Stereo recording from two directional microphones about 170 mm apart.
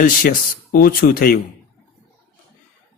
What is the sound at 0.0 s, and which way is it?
A man's voice, 55° left (ahead or behind).